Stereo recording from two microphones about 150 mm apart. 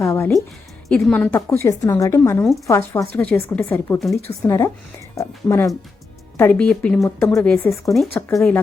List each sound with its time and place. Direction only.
0.0 s a sound: 20° left (ahead or behind)
0.9 s speech: 5° left (ahead or behind)
1.5 s a woman's voice: 20° left (ahead or behind)
3.2 s a woman's voice: 10° left (ahead or behind)